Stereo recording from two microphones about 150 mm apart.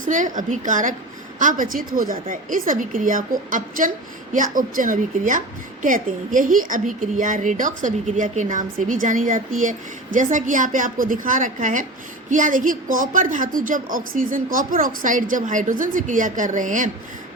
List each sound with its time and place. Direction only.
0.0 s a woman's voice: 60° right (ahead or behind)